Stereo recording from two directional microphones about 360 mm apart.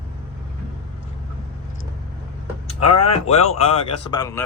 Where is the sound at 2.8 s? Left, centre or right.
Left.